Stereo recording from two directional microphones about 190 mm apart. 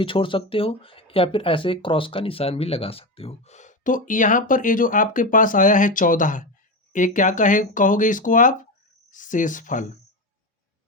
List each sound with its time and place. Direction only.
0.0 s speech: 25° left (ahead or behind); by 9.9 s 45° left (ahead or behind)